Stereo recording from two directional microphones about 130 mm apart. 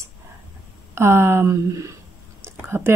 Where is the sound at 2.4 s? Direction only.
20° right (ahead or behind).